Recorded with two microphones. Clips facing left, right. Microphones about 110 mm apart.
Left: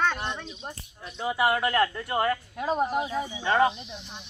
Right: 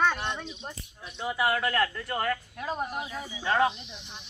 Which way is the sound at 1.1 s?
5° left (ahead or behind).